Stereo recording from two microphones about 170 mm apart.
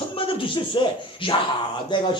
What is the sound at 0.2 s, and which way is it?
A man's voice, 30° left (ahead or behind).